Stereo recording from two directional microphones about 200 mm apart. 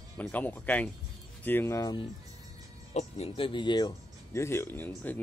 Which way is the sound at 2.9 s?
35° left (ahead or behind).